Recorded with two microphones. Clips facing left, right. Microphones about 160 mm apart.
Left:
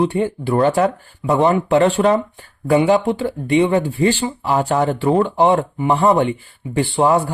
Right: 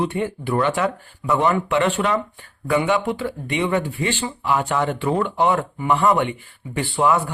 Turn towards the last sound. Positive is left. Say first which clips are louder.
# left 4 dB
turn(degrees=30)  # may be behind; listen again after turning